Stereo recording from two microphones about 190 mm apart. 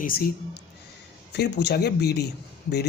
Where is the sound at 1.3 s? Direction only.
60° left (ahead or behind).